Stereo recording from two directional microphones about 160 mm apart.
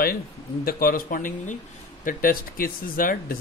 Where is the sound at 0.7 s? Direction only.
65° left (ahead or behind).